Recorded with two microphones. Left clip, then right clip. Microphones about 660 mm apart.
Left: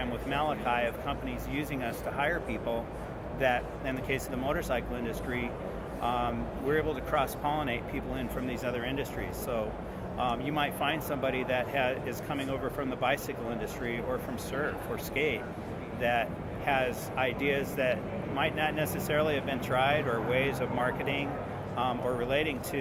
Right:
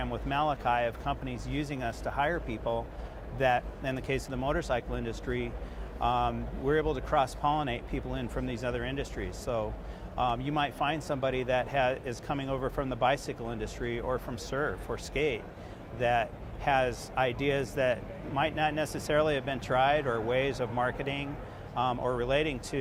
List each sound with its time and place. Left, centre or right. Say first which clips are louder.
0.3 s speech: right 2 dB; right
6.0 s speech: right 2 dB; right
10.2 s speech: right 1 dB; right
15.1 s speech: even; right